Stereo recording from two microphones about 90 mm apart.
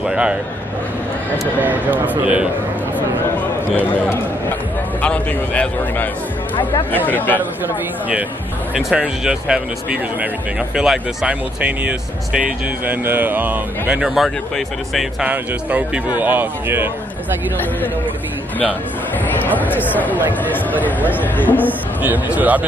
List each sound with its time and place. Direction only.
0.0 s speech: 10° right (ahead or behind)
1.6 s speech: 20° right (ahead or behind)
3.7 s a man's voice: 20° left (ahead or behind)
7.1 s speech: 20° left (ahead or behind)
7.3 s speech: 20° right (ahead or behind)
10.8 s speech: 10° right (ahead or behind)
15.2 s speech: 15° right (ahead or behind)
19.2 s speech: 20° left (ahead or behind)
21.5 s speech: 20° right (ahead or behind)